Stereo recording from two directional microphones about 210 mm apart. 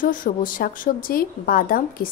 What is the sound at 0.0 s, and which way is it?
A woman's voice, 40° left (ahead or behind).